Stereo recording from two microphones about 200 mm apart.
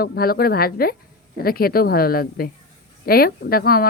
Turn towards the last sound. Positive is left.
turn(degrees=50)  # may be behind; listen again after turning